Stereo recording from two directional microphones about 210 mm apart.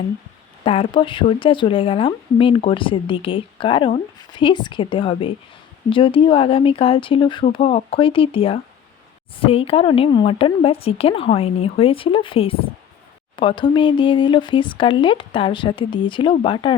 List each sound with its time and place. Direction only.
0.6 s speech: 25° left (ahead or behind)